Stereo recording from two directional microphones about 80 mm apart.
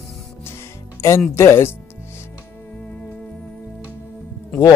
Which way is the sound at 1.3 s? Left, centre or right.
Left.